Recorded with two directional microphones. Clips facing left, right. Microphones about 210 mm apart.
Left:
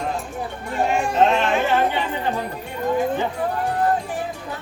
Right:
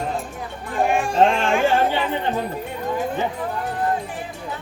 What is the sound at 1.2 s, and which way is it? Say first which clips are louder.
Music: right 1 dB; 30° right (ahead or behind).